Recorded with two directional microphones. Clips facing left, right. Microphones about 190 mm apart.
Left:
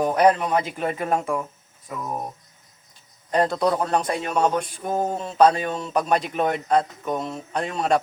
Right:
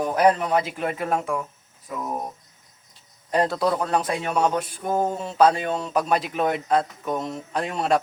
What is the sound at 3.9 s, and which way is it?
Speech, 5° right (ahead or behind).